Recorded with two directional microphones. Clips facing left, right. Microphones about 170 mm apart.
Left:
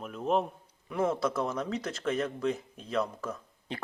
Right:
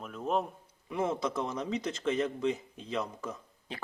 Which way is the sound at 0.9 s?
20° right (ahead or behind).